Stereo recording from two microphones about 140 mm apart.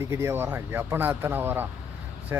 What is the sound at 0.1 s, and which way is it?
Speech, 20° right (ahead or behind).